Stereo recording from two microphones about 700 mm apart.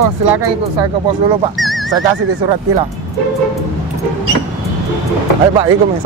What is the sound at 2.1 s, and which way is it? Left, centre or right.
Speech, right.